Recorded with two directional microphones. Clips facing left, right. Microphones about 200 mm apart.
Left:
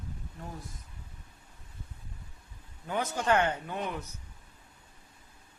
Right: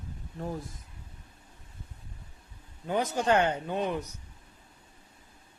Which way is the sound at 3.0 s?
25° right (ahead or behind).